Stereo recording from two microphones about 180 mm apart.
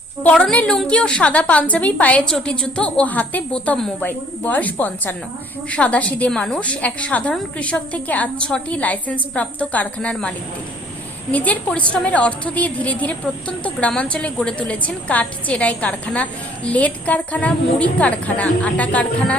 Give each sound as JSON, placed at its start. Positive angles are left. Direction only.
{"t": 0.2, "sound": "a woman's voice", "side_deg": 5}